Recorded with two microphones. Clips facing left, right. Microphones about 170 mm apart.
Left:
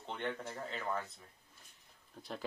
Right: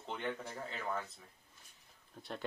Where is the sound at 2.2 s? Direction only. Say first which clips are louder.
Even; centre (ahead or behind).